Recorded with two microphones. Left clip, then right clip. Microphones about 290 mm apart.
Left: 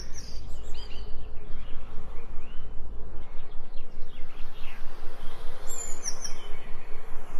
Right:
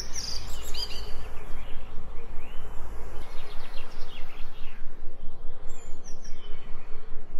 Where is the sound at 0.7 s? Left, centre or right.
Right.